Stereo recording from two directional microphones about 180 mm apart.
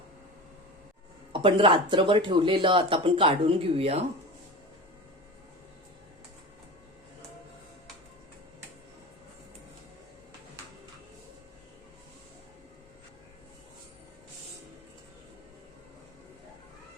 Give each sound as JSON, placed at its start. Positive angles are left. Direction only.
{"t": 1.3, "sound": "speech", "side_deg": -30}